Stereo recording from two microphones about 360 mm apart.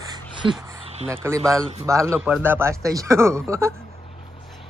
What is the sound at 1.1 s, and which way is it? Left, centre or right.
Speech, centre.